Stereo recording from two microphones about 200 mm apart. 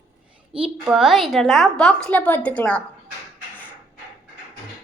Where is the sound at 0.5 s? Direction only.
25° right (ahead or behind).